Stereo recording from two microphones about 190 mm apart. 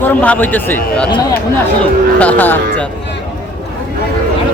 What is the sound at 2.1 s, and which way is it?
Speech, 10° left (ahead or behind).